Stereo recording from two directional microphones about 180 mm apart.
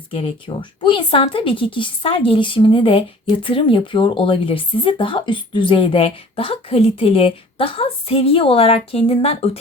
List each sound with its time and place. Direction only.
0.1 s speech: 30° left (ahead or behind)